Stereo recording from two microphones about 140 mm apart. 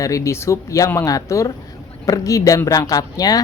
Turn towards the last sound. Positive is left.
turn(degrees=25)  # may be behind; listen again after turning